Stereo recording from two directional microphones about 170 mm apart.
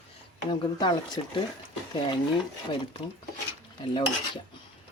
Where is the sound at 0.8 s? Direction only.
25° left (ahead or behind).